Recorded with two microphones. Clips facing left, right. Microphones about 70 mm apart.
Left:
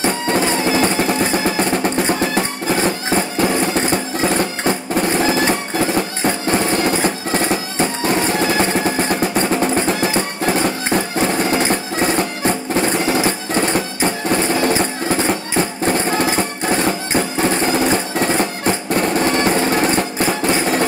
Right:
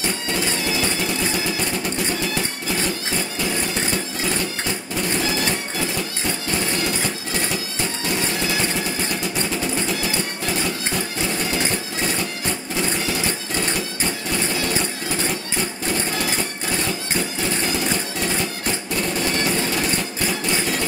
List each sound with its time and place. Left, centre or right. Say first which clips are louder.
0.0 s music: left 7 dB; left